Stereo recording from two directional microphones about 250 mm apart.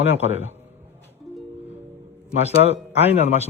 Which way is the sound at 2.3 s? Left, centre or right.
Right.